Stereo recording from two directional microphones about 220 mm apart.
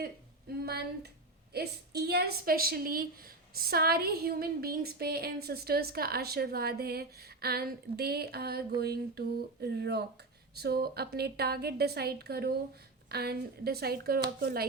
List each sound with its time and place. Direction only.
0.6 s a woman's voice: 45° right (ahead or behind)